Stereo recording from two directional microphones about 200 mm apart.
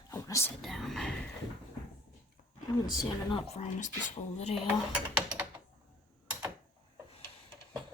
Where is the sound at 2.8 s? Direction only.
20° left (ahead or behind).